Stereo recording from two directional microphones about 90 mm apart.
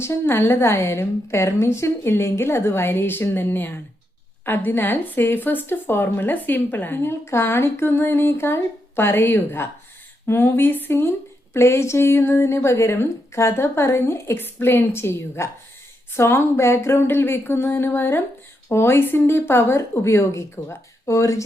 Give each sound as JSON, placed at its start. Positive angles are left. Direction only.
{"t": 0.0, "sound": "speech", "side_deg": 30}